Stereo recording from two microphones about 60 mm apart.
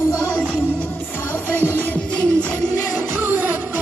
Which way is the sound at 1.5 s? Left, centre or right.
Left.